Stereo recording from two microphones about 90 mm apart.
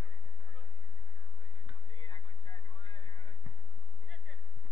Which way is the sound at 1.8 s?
55° left (ahead or behind).